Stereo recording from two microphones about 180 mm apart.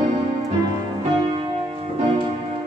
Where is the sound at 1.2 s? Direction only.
25° right (ahead or behind).